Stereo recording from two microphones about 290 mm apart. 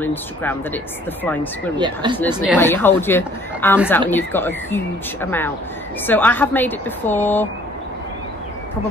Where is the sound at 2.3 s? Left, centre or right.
Centre.